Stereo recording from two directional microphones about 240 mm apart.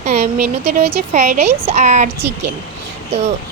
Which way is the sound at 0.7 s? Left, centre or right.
Right.